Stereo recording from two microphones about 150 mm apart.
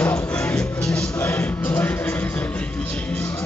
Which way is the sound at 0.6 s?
5° left (ahead or behind).